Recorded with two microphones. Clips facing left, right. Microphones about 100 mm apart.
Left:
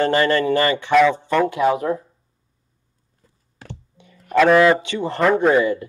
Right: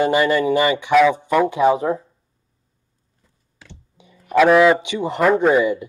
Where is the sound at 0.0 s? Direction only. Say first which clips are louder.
Right 1 dB; 10° right (ahead or behind).